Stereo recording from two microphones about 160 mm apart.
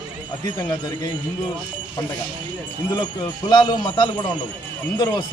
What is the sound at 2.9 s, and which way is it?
Speech, 25° left (ahead or behind).